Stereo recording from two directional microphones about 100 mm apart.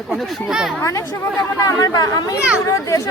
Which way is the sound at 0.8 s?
30° left (ahead or behind).